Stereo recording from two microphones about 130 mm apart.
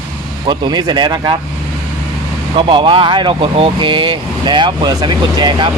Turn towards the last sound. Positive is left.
turn(degrees=-35)  # may be behind; listen again after turning